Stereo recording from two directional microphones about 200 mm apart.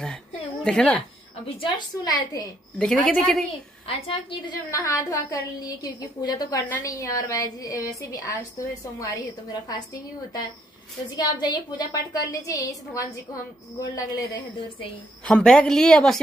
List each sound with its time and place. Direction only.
0.7 s a man's voice: 5° left (ahead or behind)
1.6 s a woman's voice: 20° left (ahead or behind)
2.8 s a man's voice: 5° left (ahead or behind)
4.1 s a woman's voice: 25° left (ahead or behind)
11.1 s a woman's voice: 20° left (ahead or behind)
15.2 s a man's voice: 5° left (ahead or behind)